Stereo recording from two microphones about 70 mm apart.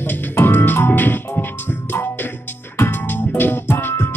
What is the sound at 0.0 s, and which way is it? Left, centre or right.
Music, left.